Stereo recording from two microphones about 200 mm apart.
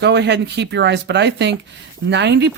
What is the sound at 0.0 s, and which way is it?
Speech, 55° right (ahead or behind).